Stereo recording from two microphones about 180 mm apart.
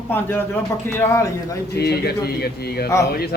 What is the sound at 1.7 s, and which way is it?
Speech, 65° left (ahead or behind).